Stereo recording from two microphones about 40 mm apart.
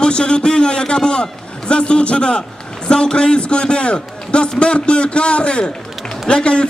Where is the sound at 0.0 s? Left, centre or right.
Left.